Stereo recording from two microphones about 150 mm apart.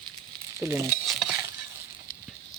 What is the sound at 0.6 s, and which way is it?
Speech, 20° right (ahead or behind).